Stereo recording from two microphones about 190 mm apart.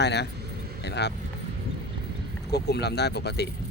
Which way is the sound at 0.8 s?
60° left (ahead or behind).